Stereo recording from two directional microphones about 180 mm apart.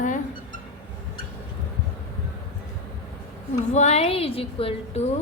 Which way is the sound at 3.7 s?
40° left (ahead or behind).